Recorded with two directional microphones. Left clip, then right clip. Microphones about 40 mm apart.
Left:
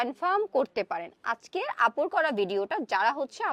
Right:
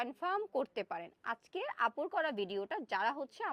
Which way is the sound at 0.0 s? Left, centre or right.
Left.